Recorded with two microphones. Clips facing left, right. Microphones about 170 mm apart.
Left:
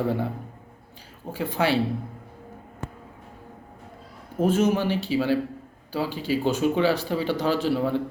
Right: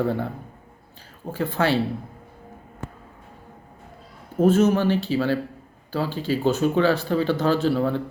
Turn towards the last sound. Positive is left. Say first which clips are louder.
# right 2 dB
turn(degrees=10)  # may be behind; listen again after turning